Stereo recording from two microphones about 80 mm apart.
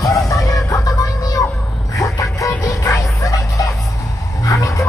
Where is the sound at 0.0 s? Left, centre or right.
Left.